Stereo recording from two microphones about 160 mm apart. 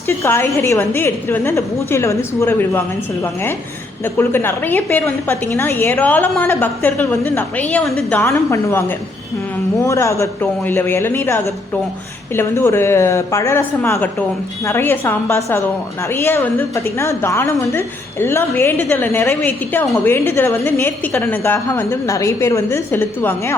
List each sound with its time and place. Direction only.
0.2 s a woman's voice: 15° left (ahead or behind)
4.0 s a woman's voice: 15° left (ahead or behind)
8.2 s a woman's voice: 15° left (ahead or behind)